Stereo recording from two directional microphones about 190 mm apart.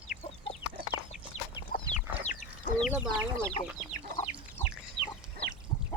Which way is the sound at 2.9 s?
10° right (ahead or behind).